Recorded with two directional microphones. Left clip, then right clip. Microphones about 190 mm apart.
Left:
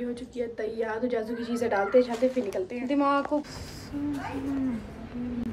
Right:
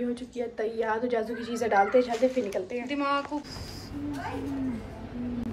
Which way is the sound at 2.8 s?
55° left (ahead or behind).